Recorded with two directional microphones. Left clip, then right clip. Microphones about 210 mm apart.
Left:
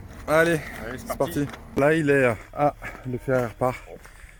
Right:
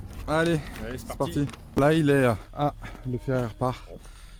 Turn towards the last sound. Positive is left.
turn(degrees=-5)  # may be behind; listen again after turning